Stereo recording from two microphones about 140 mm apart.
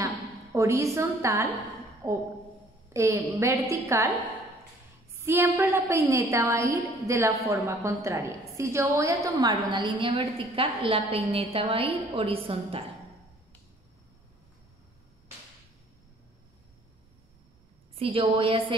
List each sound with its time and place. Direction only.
0.0 s a woman's voice: 20° right (ahead or behind)
2.0 s a woman's voice: 30° right (ahead or behind)
2.9 s a woman's voice: 20° right (ahead or behind)
5.2 s a woman's voice: 15° right (ahead or behind); by 12.8 s 45° right (ahead or behind)
17.9 s a woman's voice: 40° right (ahead or behind)